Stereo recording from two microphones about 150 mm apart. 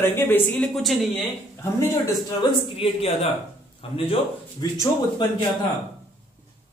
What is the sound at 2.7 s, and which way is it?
A man's voice, 40° left (ahead or behind).